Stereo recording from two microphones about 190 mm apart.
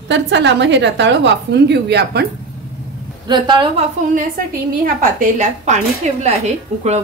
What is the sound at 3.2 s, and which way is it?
Speech, 25° right (ahead or behind).